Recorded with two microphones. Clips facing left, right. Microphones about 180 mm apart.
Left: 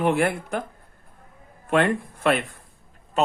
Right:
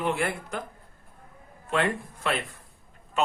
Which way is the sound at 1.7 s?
55° left (ahead or behind).